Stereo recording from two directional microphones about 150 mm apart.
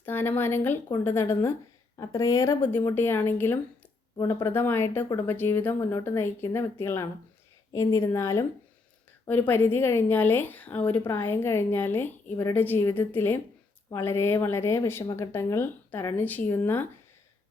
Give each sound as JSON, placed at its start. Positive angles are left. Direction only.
{"t": 0.0, "sound": "a woman's voice", "side_deg": 15}